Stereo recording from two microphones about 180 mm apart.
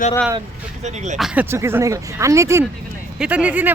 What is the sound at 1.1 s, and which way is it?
Speech, 5° right (ahead or behind).